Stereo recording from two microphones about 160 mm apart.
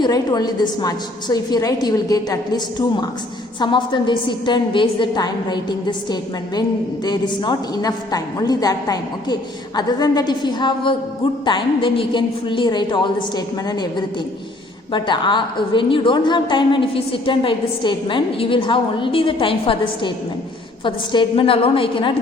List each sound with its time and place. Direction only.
0.0 s a woman's voice: 25° left (ahead or behind)
14.9 s a woman's voice: 30° left (ahead or behind)